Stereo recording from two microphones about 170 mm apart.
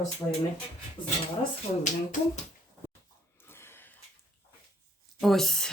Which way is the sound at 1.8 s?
45° left (ahead or behind).